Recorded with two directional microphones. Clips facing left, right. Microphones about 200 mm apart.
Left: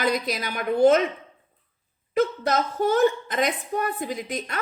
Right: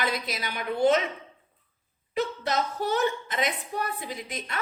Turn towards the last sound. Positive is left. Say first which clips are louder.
# left 5 dB
turn(degrees=45)  # may be behind; listen again after turning